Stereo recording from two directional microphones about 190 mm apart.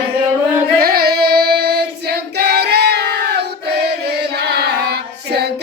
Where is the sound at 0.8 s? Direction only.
55° right (ahead or behind).